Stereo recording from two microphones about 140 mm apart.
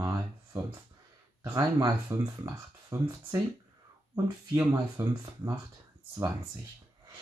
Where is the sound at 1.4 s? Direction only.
25° right (ahead or behind).